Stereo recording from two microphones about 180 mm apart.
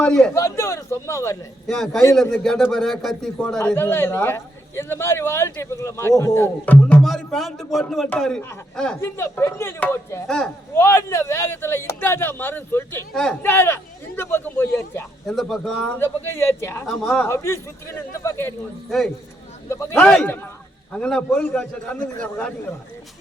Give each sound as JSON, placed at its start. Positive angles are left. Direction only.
{"t": 0.0, "sound": "a man's voice", "side_deg": 5}
{"t": 0.3, "sound": "a man's voice", "side_deg": 15}
{"t": 1.6, "sound": "speech", "side_deg": 0}
{"t": 3.6, "sound": "a man's voice", "side_deg": 10}
{"t": 10.2, "sound": "speech", "side_deg": 5}
{"t": 10.8, "sound": "a man's voice", "side_deg": 15}
{"t": 15.3, "sound": "speech", "side_deg": 0}
{"t": 16.0, "sound": "a man's voice", "side_deg": 15}
{"t": 16.8, "sound": "speech", "side_deg": 0}
{"t": 17.2, "sound": "a man's voice", "side_deg": 15}
{"t": 18.9, "sound": "speech", "side_deg": 0}
{"t": 19.6, "sound": "a man's voice", "side_deg": 15}